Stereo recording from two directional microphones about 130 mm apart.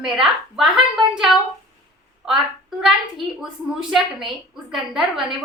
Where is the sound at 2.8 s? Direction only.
5° right (ahead or behind).